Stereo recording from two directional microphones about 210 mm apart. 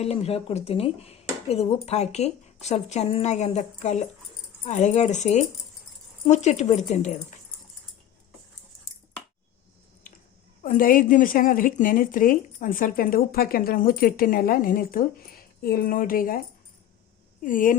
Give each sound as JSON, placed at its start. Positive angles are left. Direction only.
{"t": 0.0, "sound": "a woman's voice", "side_deg": 30}
{"t": 10.6, "sound": "a woman's voice", "side_deg": 40}
{"t": 17.4, "sound": "a woman's voice", "side_deg": 40}